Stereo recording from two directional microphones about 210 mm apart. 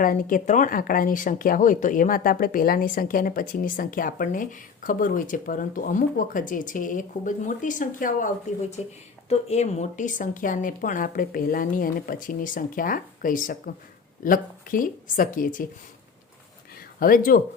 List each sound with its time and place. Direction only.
0.0 s speech: 40° left (ahead or behind)
9.3 s speech: 30° left (ahead or behind)
17.0 s speech: 40° left (ahead or behind)